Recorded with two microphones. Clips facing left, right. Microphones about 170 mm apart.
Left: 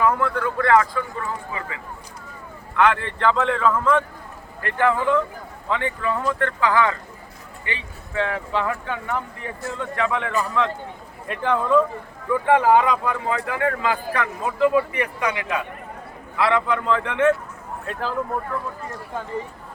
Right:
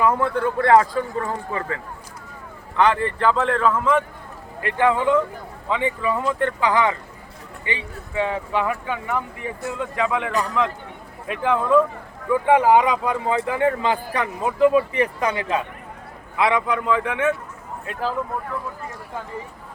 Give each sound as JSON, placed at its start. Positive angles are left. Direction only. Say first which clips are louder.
{"t": 0.0, "sound": "speech", "louder": "right 1 dB", "side_deg": -20}
{"t": 0.6, "sound": "speech", "louder": "right 2 dB", "side_deg": -35}
{"t": 3.0, "sound": "speech", "louder": "right 1 dB", "side_deg": -5}
{"t": 12.3, "sound": "speech", "louder": "right 1 dB", "side_deg": -15}
{"t": 16.4, "sound": "speech", "louder": "even", "side_deg": -15}